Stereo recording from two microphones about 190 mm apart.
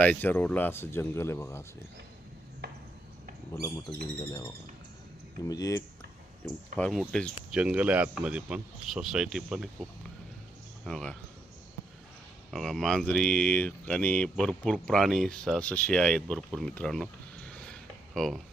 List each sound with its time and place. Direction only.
0.0 s speech: 10° left (ahead or behind)
3.9 s speech: 60° right (ahead or behind)
4.3 s speech: 20° left (ahead or behind)
6.7 s speech: 5° left (ahead or behind)
10.8 s speech: centre (ahead or behind)
12.5 s speech: centre (ahead or behind)
16.5 s a sound: centre (ahead or behind)